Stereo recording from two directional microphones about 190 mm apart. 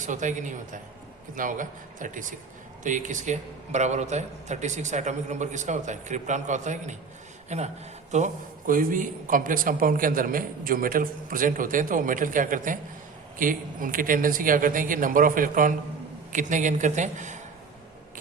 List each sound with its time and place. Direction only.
0.0 s a man's voice: 40° right (ahead or behind)